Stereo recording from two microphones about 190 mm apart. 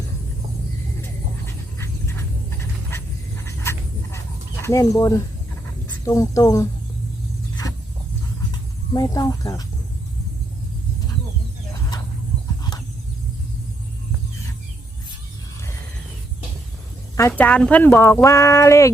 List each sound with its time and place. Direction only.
1.5 s a sound: 15° left (ahead or behind)
4.6 s speech: 15° left (ahead or behind)
8.9 s speech: 20° left (ahead or behind)
17.2 s speech: 10° left (ahead or behind)